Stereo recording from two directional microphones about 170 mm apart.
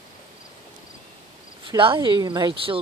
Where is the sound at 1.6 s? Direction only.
30° right (ahead or behind).